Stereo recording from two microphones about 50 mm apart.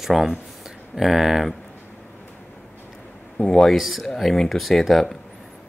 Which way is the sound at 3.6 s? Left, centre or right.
Centre.